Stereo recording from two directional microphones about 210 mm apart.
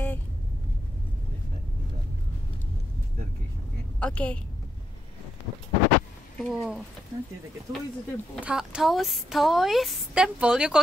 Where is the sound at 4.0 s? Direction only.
5° left (ahead or behind).